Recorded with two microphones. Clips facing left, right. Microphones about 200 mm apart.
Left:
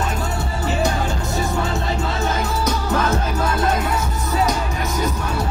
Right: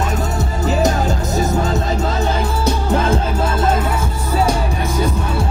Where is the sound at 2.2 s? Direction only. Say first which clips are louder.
Right 3 dB; 30° right (ahead or behind).